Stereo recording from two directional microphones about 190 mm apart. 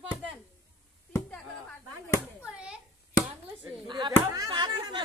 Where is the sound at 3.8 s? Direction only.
25° right (ahead or behind).